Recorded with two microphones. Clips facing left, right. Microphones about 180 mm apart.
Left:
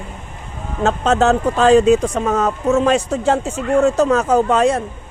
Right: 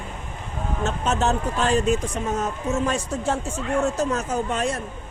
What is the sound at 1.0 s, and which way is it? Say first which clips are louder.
A man's voice: left 8 dB; 90° left.